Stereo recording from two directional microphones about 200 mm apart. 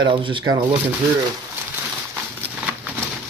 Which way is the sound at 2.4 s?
5° right (ahead or behind).